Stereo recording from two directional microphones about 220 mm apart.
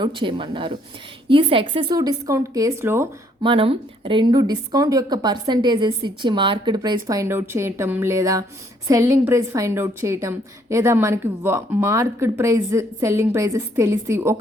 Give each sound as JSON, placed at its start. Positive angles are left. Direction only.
{"t": 0.0, "sound": "a woman's voice", "side_deg": -20}
{"t": 3.4, "sound": "a woman's voice", "side_deg": -25}